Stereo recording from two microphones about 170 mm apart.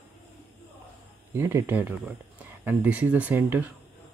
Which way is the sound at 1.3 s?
15° right (ahead or behind).